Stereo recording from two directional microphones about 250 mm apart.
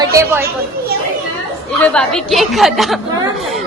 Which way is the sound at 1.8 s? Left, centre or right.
Centre.